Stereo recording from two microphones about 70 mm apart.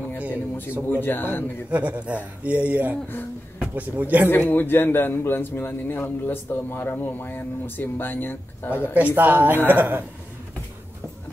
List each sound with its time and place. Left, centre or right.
0.8 s speech: left
1.7 s speech: right
4.5 s speech: left
8.9 s speech: right